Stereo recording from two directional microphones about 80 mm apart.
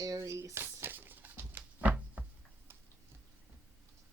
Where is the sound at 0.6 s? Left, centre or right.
Right.